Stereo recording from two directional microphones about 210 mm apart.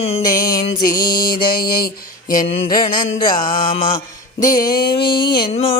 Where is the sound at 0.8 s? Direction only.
45° left (ahead or behind).